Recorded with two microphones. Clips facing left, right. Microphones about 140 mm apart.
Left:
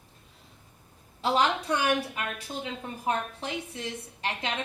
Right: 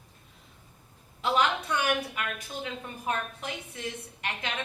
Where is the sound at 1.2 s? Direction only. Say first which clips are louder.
Left 1 dB; 30° left (ahead or behind).